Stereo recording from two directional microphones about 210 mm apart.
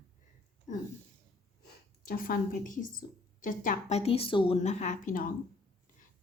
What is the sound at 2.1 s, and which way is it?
A woman's voice, 45° left (ahead or behind).